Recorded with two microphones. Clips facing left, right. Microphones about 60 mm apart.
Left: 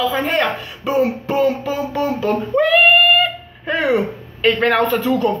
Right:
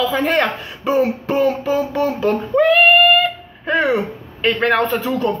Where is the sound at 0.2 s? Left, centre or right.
Right.